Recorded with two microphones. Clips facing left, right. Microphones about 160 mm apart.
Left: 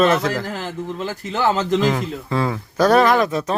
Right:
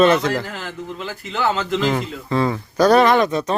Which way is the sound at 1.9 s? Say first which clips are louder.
Even; centre (ahead or behind).